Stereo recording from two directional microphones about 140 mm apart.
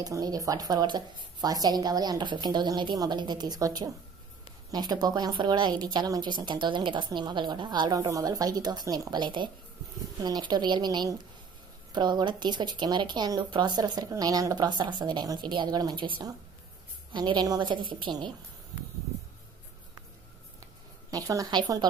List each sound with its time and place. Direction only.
0.0 s speech: 25° right (ahead or behind)
21.1 s speech: 25° right (ahead or behind)